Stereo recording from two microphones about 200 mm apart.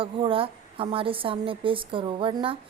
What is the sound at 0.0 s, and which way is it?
Speech, 25° right (ahead or behind).